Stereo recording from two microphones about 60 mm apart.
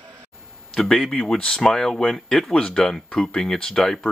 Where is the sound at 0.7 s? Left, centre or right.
Centre.